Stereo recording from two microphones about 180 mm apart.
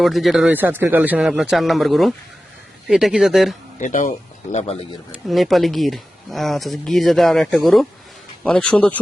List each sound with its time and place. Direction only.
0.0 s speech: centre (ahead or behind)
3.8 s speech: 45° left (ahead or behind)
4.5 s speech: 35° left (ahead or behind)
5.3 s speech: centre (ahead or behind)